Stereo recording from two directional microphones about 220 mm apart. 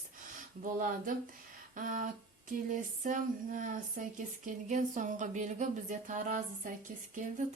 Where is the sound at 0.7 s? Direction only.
40° right (ahead or behind).